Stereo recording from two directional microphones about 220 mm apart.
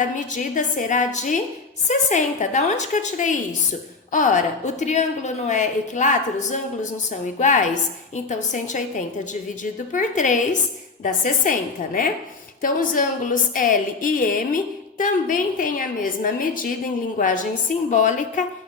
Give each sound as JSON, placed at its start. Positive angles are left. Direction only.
{"t": 0.0, "sound": "a woman's voice", "side_deg": 35}
{"t": 9.9, "sound": "a woman's voice", "side_deg": 35}
{"t": 12.6, "sound": "a woman's voice", "side_deg": 35}